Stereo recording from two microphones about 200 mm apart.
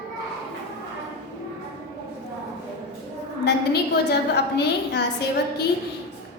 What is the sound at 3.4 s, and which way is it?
A woman's voice, 55° left (ahead or behind).